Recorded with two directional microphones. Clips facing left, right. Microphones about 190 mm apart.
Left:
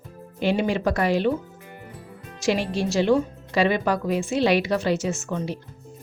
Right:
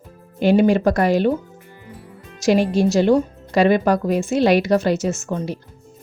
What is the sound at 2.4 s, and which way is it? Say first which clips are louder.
Speech: right 7 dB; 45° right (ahead or behind).